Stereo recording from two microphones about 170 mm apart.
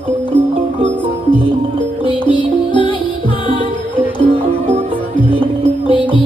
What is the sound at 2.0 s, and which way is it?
Music, 30° right (ahead or behind).